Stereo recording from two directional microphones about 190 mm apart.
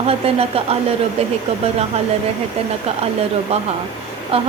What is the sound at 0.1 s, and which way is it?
Speech, 30° right (ahead or behind).